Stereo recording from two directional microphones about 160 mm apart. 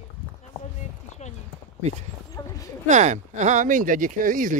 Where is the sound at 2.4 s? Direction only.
20° left (ahead or behind).